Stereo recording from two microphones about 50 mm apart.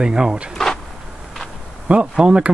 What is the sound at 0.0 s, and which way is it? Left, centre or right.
Speech, centre.